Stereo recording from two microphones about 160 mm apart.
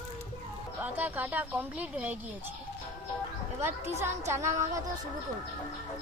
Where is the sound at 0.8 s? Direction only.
10° right (ahead or behind).